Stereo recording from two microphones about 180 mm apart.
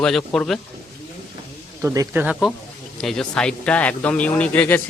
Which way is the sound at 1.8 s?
15° right (ahead or behind).